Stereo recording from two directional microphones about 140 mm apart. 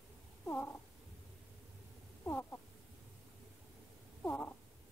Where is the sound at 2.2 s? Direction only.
15° left (ahead or behind).